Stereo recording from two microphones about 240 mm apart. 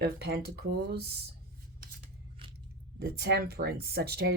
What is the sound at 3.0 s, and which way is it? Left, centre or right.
Speech, right.